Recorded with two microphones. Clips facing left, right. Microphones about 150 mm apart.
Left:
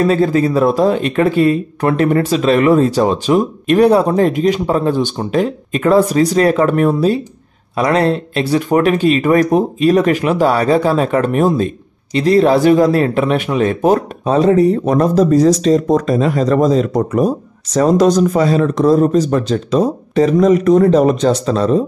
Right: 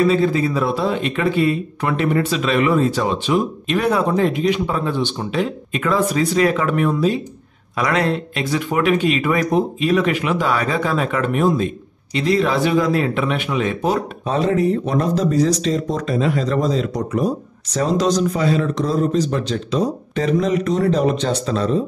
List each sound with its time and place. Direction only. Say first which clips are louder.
0.0 s speech: left 3 dB; 40° left (ahead or behind)